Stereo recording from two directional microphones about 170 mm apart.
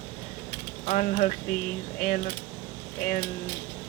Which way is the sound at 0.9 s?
45° left (ahead or behind).